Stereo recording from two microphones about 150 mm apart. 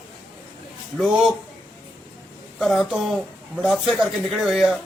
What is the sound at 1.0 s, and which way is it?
Speech, centre (ahead or behind).